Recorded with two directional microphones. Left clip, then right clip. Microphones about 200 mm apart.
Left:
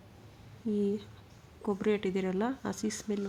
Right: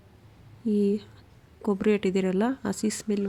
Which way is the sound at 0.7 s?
20° right (ahead or behind).